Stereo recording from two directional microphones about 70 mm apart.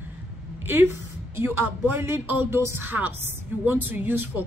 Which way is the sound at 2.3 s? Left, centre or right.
Right.